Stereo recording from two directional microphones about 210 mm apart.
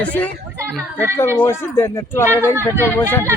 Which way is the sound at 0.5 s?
10° right (ahead or behind).